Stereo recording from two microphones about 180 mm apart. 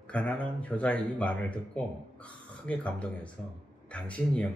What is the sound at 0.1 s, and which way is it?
Speech, 10° left (ahead or behind).